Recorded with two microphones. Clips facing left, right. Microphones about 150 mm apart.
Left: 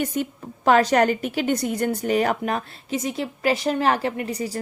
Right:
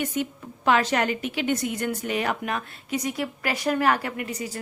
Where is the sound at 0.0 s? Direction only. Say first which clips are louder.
Left 2 dB; 40° left (ahead or behind).